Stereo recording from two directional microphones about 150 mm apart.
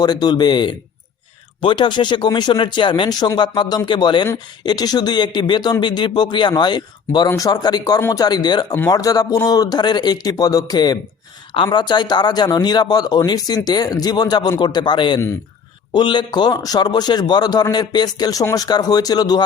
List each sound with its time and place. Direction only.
0.0 s a man's voice: 25° left (ahead or behind)